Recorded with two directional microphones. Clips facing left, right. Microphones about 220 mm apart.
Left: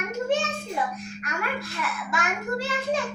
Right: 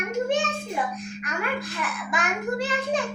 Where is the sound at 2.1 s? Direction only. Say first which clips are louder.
Right 2 dB; 15° right (ahead or behind).